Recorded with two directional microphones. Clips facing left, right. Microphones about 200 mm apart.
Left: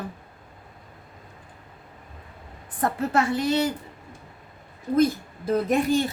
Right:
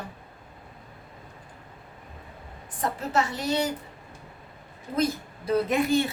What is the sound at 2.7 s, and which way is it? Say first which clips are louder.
Speech: left 3 dB; 55° left (ahead or behind).